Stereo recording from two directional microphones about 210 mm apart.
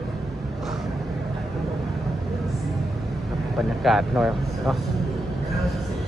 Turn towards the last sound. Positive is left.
turn(degrees=0)  # may be behind; listen again after turning